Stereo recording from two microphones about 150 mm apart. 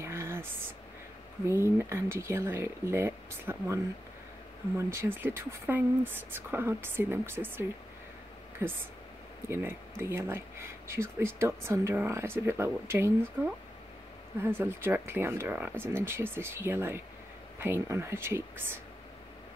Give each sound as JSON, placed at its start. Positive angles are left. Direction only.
{"t": 0.0, "sound": "a sound", "side_deg": -15}
{"t": 1.5, "sound": "speech", "side_deg": -15}
{"t": 14.4, "sound": "speech", "side_deg": -15}